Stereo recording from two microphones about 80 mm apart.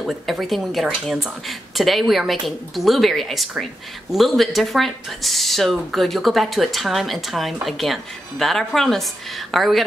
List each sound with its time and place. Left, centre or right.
0.0 s speech: centre